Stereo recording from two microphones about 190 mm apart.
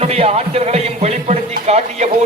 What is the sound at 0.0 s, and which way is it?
A man's voice, 35° right (ahead or behind).